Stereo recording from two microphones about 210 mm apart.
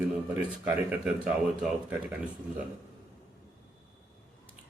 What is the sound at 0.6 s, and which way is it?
Speech, 5° right (ahead or behind).